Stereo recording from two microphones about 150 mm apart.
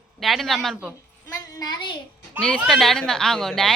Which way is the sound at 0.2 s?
Centre (ahead or behind).